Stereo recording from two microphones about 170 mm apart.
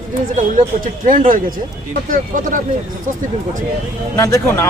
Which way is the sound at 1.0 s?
50° right (ahead or behind).